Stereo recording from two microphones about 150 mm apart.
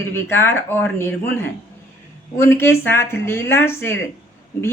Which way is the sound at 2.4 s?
15° left (ahead or behind).